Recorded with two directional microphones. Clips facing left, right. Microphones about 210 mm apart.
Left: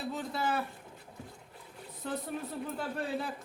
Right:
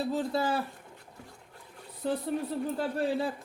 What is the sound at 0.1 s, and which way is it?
Speech, 30° right (ahead or behind).